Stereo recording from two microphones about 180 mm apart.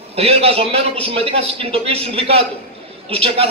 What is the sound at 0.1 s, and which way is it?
A man's voice, 35° right (ahead or behind).